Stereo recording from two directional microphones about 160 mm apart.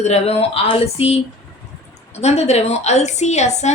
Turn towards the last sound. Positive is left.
turn(degrees=45)  # may be behind; listen again after turning